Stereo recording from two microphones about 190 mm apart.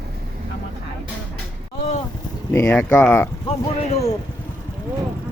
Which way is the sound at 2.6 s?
10° left (ahead or behind).